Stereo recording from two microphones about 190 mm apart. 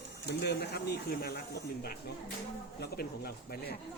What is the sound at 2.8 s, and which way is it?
Speech, 55° left (ahead or behind).